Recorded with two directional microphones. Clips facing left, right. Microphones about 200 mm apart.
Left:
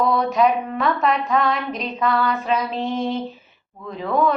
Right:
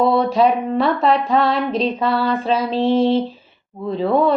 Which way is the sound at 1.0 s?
30° right (ahead or behind).